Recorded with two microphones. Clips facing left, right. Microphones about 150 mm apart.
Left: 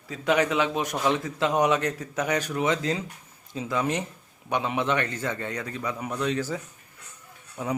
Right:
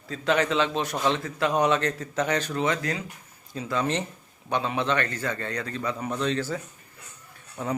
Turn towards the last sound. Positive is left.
turn(degrees=10)  # may be behind; listen again after turning